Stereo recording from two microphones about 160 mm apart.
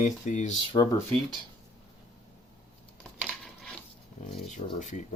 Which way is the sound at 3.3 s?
Centre (ahead or behind).